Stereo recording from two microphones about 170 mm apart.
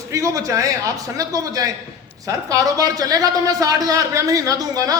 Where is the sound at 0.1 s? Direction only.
20° right (ahead or behind).